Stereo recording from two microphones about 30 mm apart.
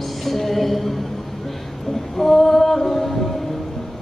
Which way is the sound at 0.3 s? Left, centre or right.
Centre.